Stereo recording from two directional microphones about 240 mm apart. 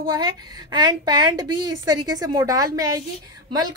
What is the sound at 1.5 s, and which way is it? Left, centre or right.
Speech, right.